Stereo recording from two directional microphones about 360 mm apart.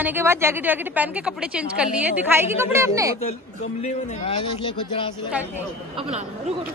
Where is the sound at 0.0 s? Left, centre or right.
Centre.